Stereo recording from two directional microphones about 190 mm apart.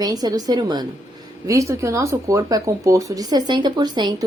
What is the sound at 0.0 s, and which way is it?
Speech, 20° right (ahead or behind).